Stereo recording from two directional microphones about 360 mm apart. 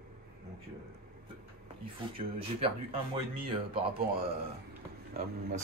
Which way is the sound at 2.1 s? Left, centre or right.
Centre.